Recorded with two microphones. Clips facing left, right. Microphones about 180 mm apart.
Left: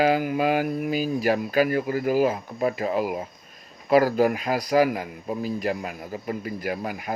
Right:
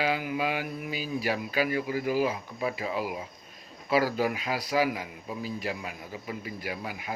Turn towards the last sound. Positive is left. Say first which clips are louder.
# left 7 dB
turn(degrees=45)  # may be behind; listen again after turning